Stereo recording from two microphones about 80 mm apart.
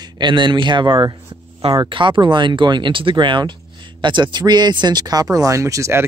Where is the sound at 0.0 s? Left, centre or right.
Right.